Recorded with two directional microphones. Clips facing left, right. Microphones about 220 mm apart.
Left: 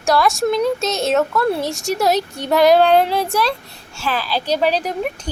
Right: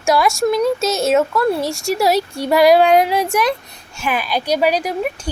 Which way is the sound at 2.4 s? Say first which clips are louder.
Right 1 dB; 10° right (ahead or behind).